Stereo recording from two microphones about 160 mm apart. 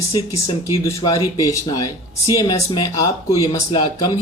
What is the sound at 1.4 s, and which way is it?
Speech, 20° left (ahead or behind).